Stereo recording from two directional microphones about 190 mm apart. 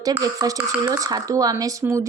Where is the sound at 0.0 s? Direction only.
20° right (ahead or behind).